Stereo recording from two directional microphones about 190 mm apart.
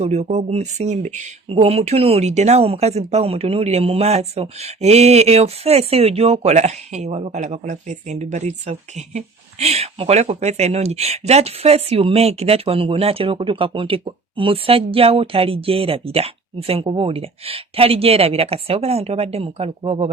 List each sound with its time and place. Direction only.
0.0 s speech: 35° right (ahead or behind)